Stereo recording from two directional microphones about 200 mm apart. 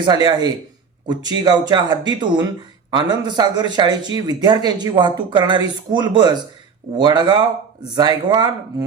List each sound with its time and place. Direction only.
0.0 s speech: 20° right (ahead or behind)